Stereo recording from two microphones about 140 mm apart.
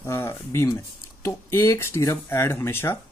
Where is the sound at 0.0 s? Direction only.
20° left (ahead or behind).